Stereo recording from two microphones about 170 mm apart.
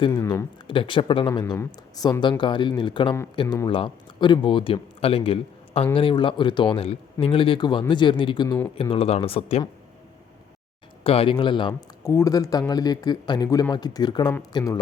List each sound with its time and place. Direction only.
0.2 s speech: 15° left (ahead or behind)
0.7 s speech: 30° left (ahead or behind)
11.0 s speech: 35° left (ahead or behind)